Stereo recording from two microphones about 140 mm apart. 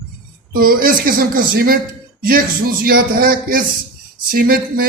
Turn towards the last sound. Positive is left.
turn(degrees=-90)